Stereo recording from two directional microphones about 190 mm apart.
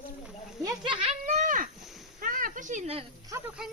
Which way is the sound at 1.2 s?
45° right (ahead or behind).